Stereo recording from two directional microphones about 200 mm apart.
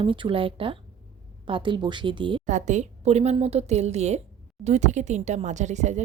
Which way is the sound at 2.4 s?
35° right (ahead or behind).